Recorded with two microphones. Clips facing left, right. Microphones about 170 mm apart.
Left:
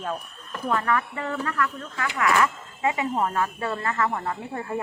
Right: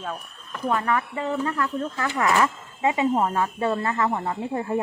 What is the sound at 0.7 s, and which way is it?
Speech, 20° right (ahead or behind).